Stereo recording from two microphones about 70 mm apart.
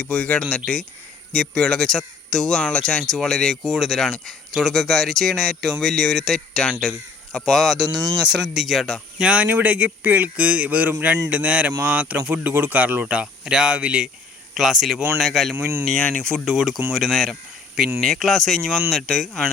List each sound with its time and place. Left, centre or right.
0.0 s speech: centre
9.1 s speech: centre
13.1 s speech: centre
14.5 s speech: centre
15.5 s speech: right
15.9 s speech: centre
16.3 s speech: centre